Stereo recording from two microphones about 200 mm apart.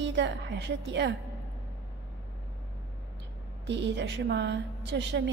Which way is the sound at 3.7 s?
60° right (ahead or behind).